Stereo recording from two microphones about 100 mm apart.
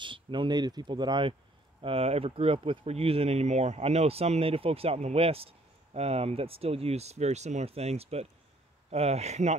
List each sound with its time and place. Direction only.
0.0 s speech: 55° right (ahead or behind)
1.8 s speech: 75° right (ahead or behind); by 9.6 s 90° right